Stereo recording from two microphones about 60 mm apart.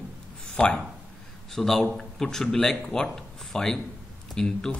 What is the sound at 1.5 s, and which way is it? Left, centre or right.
A man's voice, centre.